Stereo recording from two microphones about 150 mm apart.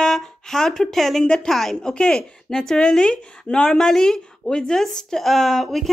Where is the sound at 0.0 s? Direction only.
Centre (ahead or behind).